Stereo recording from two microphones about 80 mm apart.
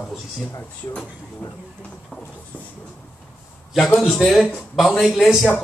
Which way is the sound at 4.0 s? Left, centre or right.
Centre.